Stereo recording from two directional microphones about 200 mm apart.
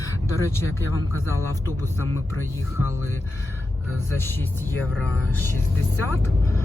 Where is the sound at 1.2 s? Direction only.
10° left (ahead or behind).